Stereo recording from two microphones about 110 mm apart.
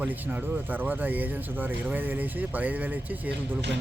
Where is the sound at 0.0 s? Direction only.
15° right (ahead or behind).